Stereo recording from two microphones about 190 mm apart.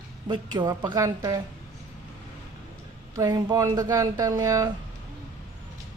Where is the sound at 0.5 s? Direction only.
20° right (ahead or behind).